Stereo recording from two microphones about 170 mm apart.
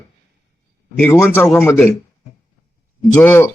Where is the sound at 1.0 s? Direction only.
10° left (ahead or behind).